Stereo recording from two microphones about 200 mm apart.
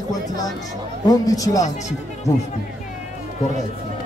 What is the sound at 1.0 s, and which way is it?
Speech, 20° left (ahead or behind).